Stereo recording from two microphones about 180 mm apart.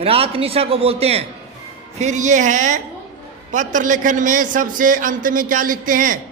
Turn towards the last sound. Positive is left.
turn(degrees=-50)  # may be behind; listen again after turning